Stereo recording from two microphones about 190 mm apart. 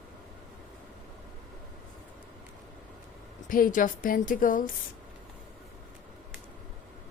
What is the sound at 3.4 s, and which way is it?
A woman's voice, 45° left (ahead or behind).